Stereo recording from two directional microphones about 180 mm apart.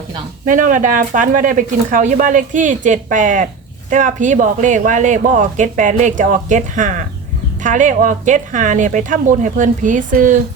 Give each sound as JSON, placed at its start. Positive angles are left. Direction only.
{"t": 0.4, "sound": "speech", "side_deg": -45}